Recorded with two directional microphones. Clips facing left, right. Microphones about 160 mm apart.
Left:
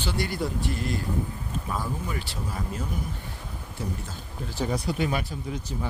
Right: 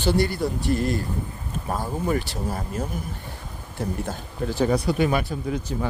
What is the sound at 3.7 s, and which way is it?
Speech, 60° right (ahead or behind).